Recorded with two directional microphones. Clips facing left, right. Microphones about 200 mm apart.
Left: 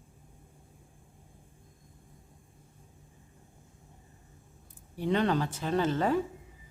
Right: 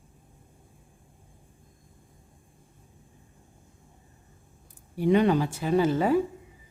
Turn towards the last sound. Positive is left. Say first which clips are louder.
# right 5 dB
turn(degrees=-10)  # may be behind; listen again after turning